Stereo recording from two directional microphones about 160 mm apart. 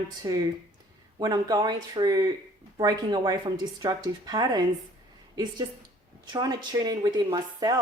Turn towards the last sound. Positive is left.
turn(degrees=-25)  # may be behind; listen again after turning